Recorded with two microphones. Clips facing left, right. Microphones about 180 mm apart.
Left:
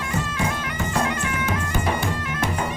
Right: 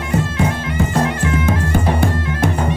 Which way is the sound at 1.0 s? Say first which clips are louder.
Right 7 dB; 30° right (ahead or behind).